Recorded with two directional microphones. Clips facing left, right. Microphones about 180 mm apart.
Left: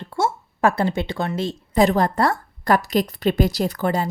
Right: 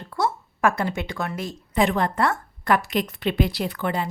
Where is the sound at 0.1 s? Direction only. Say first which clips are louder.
Left 2 dB; 30° left (ahead or behind).